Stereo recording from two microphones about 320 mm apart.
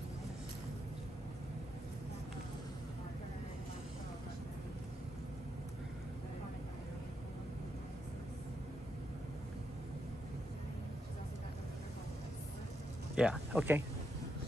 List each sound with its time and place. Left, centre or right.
13.1 s speech: centre